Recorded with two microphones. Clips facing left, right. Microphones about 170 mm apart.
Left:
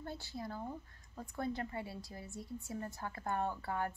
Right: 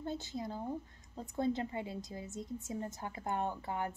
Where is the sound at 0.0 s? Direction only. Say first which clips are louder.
Right 5 dB; 20° right (ahead or behind).